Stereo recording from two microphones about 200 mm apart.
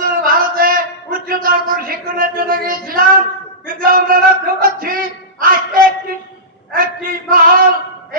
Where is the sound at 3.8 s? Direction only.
45° right (ahead or behind).